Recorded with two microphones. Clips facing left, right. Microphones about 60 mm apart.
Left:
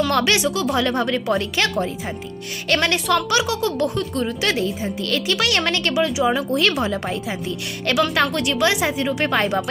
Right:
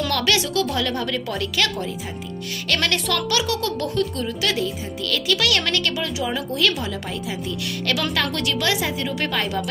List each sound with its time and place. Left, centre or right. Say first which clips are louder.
0.1 s a woman's voice: left 3 dB; left
2.7 s a woman's voice: left 4 dB; centre
4.2 s a woman's voice: left 2 dB; left
8.1 s a woman's voice: left 3 dB; left